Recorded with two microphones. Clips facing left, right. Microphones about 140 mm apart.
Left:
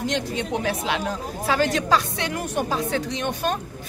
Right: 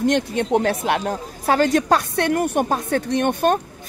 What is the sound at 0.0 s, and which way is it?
Speech, 55° right (ahead or behind).